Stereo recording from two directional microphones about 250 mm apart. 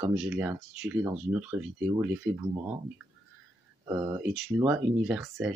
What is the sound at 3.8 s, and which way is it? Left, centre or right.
Speech, centre.